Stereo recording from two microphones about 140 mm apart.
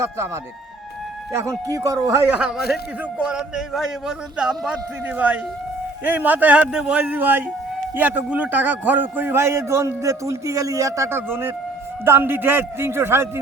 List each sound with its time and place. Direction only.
1.3 s speech: 20° right (ahead or behind)
2.4 s a man's voice: centre (ahead or behind); by 13.4 s 15° right (ahead or behind)